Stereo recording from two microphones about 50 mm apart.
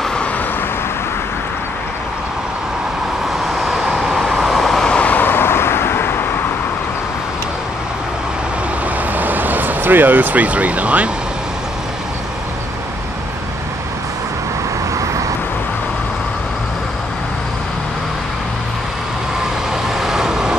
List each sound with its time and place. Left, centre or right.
3.5 s vehicle: centre
4.7 s vehicle: centre
5.0 s vehicle: left
5.3 s vehicle: left
9.1 s vehicle: right
20.0 s vehicle: centre